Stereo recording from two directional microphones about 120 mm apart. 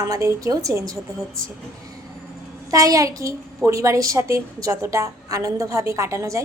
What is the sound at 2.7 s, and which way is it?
A child's voice, 30° right (ahead or behind).